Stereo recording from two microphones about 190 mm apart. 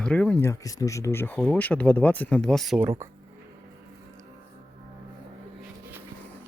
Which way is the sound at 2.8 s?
15° right (ahead or behind).